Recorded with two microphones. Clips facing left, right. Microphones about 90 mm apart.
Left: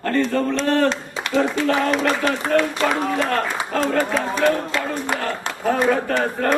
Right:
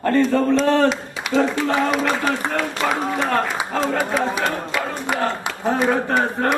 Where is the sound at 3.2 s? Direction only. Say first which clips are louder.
Right 1 dB; 15° right (ahead or behind).